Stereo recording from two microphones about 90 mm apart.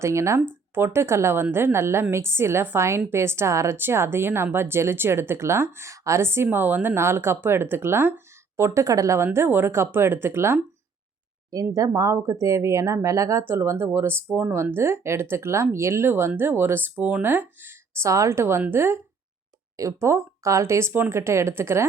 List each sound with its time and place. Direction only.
0.0 s speech: 30° right (ahead or behind)
13.4 s speech: 25° right (ahead or behind)